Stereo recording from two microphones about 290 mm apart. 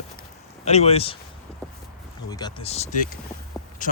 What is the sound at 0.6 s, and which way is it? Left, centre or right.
Speech, left.